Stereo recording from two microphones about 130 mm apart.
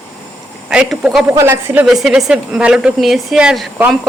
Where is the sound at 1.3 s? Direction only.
20° right (ahead or behind).